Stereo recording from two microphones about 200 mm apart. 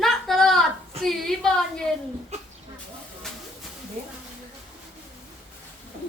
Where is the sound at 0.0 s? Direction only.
Centre (ahead or behind).